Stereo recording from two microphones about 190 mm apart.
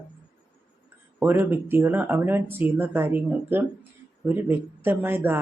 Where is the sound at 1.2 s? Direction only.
10° right (ahead or behind).